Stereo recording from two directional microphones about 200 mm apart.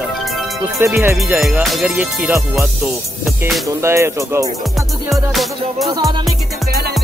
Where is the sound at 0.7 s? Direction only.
15° right (ahead or behind).